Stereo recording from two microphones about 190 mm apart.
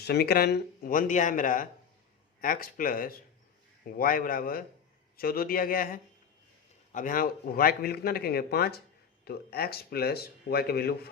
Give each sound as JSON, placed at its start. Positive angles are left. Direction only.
{"t": 0.0, "sound": "speech", "side_deg": 60}